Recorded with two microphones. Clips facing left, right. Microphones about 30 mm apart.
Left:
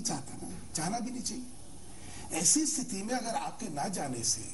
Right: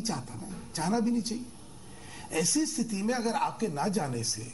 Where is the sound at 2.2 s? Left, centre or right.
Right.